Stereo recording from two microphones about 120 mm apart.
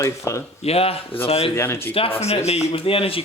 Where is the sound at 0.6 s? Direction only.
55° left (ahead or behind).